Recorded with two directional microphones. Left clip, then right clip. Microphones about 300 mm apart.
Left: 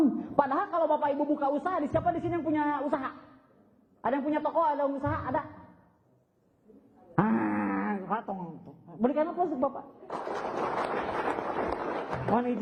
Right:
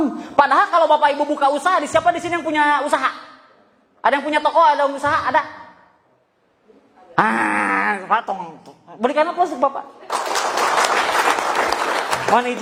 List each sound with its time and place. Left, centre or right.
0.0 s a man's voice: centre
7.2 s a man's voice: centre
9.6 s applause: centre